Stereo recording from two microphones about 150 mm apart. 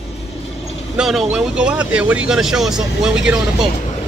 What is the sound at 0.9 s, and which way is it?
Speech, centre (ahead or behind).